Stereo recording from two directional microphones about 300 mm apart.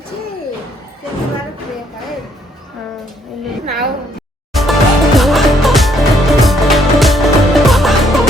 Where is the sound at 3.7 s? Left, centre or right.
Right.